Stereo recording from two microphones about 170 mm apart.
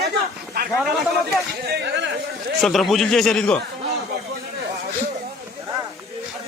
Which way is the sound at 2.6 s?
Centre (ahead or behind).